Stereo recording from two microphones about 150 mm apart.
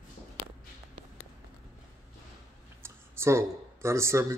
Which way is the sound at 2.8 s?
15° right (ahead or behind).